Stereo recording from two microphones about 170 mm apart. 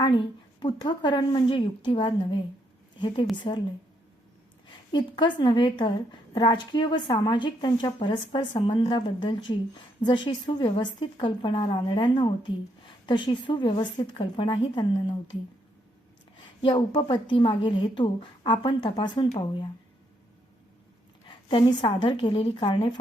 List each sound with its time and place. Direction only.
0.0 s a woman's voice: 25° left (ahead or behind)
4.7 s a woman's voice: 25° left (ahead or behind)
16.6 s a woman's voice: 30° left (ahead or behind)
21.2 s a woman's voice: 25° left (ahead or behind)